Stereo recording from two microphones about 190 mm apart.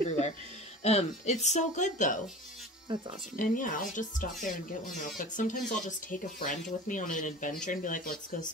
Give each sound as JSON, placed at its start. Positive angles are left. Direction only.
{"t": 0.8, "sound": "speech", "side_deg": 35}
{"t": 3.3, "sound": "speech", "side_deg": 45}